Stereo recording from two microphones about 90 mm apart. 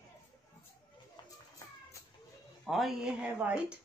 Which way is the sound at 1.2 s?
50° left (ahead or behind).